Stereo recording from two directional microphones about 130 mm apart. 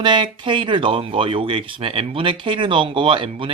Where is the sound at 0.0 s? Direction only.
35° right (ahead or behind).